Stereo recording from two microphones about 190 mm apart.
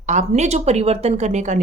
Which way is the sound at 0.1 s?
35° right (ahead or behind).